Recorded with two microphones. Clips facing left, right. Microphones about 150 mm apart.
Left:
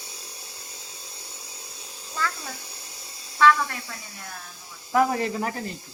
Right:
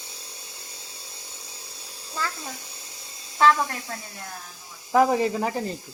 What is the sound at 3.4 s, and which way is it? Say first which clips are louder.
Speech: even; 35° right (ahead or behind).